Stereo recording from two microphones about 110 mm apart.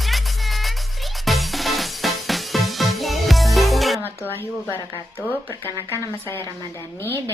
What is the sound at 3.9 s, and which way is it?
Music, 20° left (ahead or behind).